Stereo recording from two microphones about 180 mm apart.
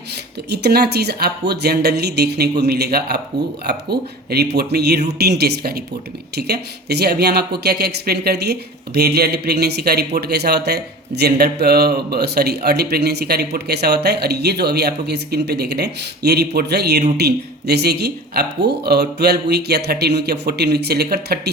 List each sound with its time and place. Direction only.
0.5 s speech: 65° right (ahead or behind)